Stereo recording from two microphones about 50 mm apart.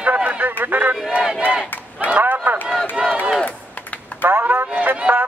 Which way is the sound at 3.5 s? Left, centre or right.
Left.